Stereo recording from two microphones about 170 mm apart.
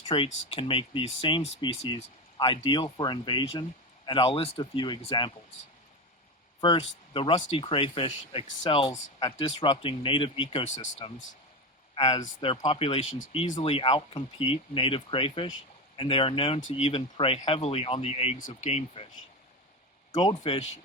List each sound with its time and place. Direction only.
0.1 s speech: 30° left (ahead or behind)
6.6 s speech: 30° left (ahead or behind); by 11.1 s 45° left (ahead or behind)
11.9 s speech: 30° left (ahead or behind)
20.1 s speech: 25° left (ahead or behind)